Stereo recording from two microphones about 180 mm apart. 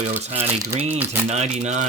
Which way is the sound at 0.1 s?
35° right (ahead or behind).